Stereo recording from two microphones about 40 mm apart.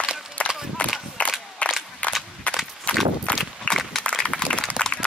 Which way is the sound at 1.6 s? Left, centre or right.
Left.